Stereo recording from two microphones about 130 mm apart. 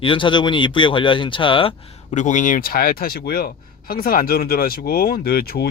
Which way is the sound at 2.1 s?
70° left (ahead or behind).